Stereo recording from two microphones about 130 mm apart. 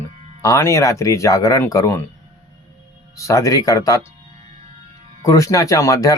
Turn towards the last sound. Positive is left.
turn(degrees=25)  # may be behind; listen again after turning